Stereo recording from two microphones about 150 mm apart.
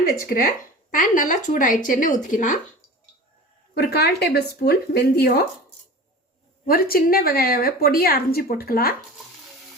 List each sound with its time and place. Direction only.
0.9 s speech: 60° left (ahead or behind)
3.8 s speech: 90° left
6.7 s a woman's voice: 85° left